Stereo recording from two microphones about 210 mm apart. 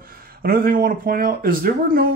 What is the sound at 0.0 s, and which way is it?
Speech, 45° right (ahead or behind).